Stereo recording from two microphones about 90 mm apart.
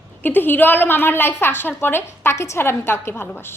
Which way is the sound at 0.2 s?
20° left (ahead or behind).